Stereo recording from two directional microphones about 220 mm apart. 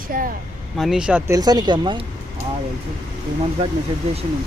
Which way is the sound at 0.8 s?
Centre (ahead or behind).